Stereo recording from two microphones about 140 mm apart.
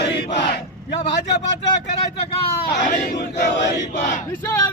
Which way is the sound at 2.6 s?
90° left.